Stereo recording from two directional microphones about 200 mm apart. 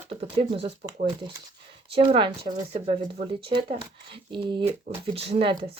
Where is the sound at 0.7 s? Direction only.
30° right (ahead or behind).